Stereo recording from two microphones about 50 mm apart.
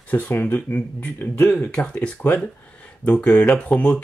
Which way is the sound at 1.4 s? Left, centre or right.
Left.